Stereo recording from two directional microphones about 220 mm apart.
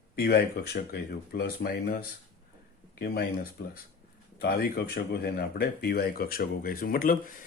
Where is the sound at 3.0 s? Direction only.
45° left (ahead or behind).